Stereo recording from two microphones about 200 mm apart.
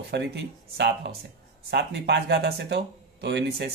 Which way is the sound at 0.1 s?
55° right (ahead or behind).